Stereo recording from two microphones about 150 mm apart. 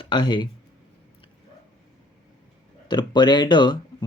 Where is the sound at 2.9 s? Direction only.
30° left (ahead or behind).